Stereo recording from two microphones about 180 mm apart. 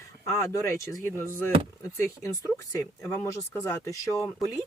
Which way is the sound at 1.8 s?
15° left (ahead or behind).